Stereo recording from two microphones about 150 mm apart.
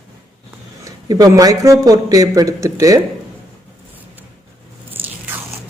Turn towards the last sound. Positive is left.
turn(degrees=-15)  # may be behind; listen again after turning